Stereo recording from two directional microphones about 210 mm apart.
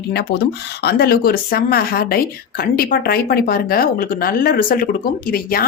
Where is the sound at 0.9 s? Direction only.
45° left (ahead or behind).